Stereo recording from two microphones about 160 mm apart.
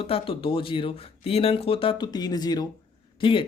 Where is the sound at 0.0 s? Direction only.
35° left (ahead or behind).